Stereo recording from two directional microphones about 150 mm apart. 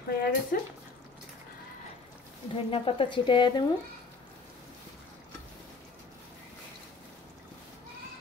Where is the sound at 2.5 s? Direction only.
35° left (ahead or behind).